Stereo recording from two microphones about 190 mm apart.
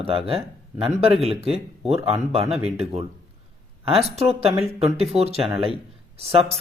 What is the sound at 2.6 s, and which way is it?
Speech, 30° right (ahead or behind).